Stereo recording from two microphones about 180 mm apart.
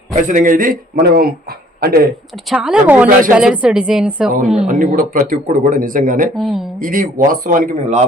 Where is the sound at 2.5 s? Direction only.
5° right (ahead or behind).